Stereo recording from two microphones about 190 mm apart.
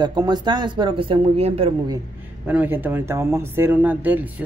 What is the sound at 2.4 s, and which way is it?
Speech, 10° right (ahead or behind).